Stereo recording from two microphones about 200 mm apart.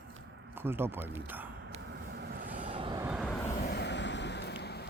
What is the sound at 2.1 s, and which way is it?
Vehicle, 50° right (ahead or behind).